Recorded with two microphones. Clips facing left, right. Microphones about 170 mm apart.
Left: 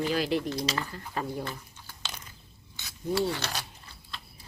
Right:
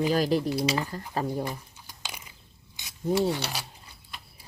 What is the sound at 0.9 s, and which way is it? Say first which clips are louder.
Speech: right 4 dB; 35° right (ahead or behind).